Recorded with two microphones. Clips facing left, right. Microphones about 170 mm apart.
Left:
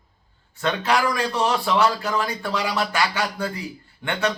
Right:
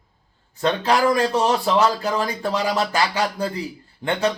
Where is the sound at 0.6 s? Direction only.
35° right (ahead or behind).